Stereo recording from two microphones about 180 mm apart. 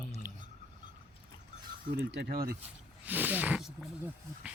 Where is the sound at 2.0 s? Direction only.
80° right; by 2.6 s 55° right (ahead or behind).